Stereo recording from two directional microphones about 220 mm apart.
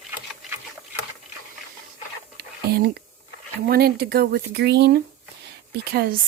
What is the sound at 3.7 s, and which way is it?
Speech, 45° right (ahead or behind).